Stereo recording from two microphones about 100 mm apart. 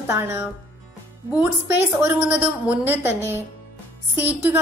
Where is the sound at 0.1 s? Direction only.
25° right (ahead or behind).